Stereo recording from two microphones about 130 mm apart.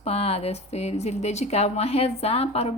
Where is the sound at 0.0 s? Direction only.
50° left (ahead or behind).